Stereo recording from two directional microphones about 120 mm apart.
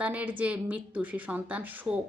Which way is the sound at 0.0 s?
10° right (ahead or behind).